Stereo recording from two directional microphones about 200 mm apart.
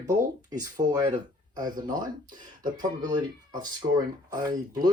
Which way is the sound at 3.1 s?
20° right (ahead or behind).